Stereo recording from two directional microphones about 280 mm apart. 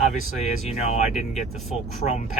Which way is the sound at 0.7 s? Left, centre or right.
Left.